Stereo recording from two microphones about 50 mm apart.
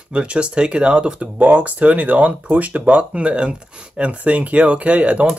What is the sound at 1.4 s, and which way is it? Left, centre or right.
Speech, right.